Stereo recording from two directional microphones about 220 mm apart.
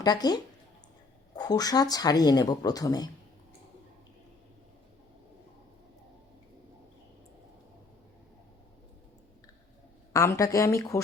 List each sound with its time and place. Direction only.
0.0 s speech: 20° left (ahead or behind)
10.1 s speech: 15° left (ahead or behind)